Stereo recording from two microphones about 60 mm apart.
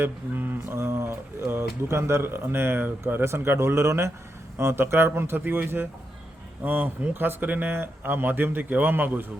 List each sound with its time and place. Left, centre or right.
0.0 s speech: right